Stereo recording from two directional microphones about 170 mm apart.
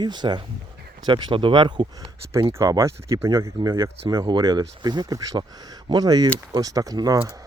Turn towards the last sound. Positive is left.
turn(degrees=-20)  # may be behind; listen again after turning